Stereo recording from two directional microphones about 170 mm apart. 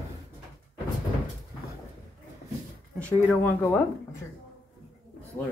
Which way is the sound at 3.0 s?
10° left (ahead or behind).